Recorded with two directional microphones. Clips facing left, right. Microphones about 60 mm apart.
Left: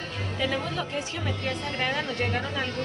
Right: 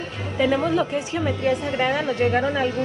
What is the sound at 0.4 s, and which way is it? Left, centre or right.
A woman's voice, centre.